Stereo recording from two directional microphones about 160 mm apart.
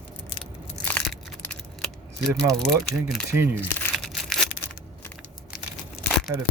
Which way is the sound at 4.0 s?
5° left (ahead or behind).